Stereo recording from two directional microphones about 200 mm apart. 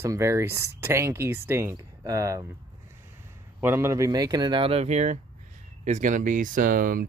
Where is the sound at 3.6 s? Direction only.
15° right (ahead or behind).